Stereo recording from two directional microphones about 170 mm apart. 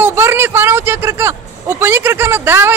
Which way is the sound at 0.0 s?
15° right (ahead or behind).